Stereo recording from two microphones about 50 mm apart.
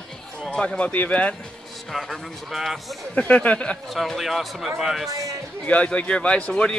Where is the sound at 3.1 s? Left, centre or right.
Left.